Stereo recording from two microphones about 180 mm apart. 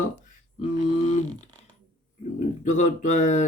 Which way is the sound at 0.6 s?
35° left (ahead or behind).